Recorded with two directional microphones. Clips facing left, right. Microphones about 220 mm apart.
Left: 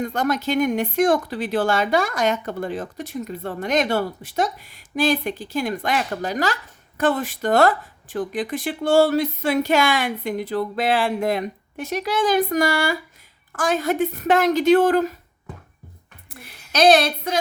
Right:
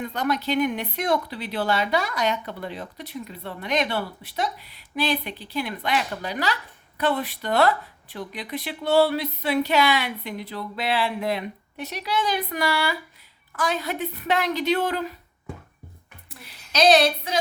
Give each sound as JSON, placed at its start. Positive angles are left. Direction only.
{"t": 0.0, "sound": "speech", "side_deg": 45}
{"t": 16.5, "sound": "speech", "side_deg": 55}